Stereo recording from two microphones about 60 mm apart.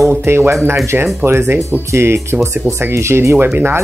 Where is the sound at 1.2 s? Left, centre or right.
Right.